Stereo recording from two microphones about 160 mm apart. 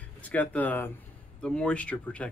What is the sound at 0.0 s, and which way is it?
Speech, 10° left (ahead or behind).